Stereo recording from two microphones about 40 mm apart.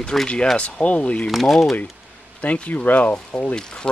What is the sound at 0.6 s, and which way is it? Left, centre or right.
Speech, left.